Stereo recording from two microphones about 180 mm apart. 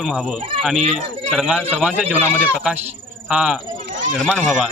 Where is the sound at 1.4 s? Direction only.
5° right (ahead or behind).